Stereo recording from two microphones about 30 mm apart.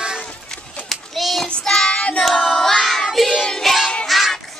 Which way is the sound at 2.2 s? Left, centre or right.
Centre.